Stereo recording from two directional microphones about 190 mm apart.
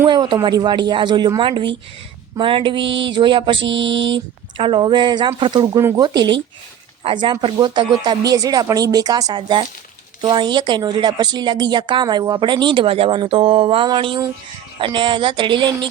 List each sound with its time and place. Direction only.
0.1 s a woman's voice: 25° right (ahead or behind)
3.7 s mantra: 70° right (ahead or behind)
4.5 s a woman's voice: 25° right (ahead or behind)